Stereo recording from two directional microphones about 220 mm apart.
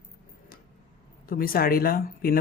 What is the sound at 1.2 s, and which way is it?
Speech, 40° left (ahead or behind).